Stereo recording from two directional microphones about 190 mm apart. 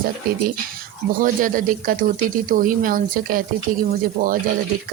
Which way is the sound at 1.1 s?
50° right (ahead or behind).